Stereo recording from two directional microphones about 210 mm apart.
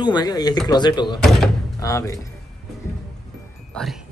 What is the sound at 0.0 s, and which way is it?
Speech, 20° left (ahead or behind).